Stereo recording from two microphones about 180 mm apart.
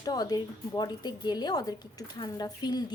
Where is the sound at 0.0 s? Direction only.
20° left (ahead or behind).